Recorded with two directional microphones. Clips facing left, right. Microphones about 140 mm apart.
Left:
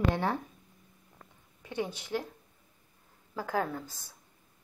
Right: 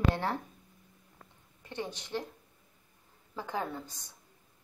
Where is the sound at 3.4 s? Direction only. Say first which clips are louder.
Left 4 dB; 5° left (ahead or behind).